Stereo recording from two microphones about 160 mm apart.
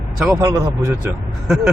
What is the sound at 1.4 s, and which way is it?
Speech, 5° right (ahead or behind).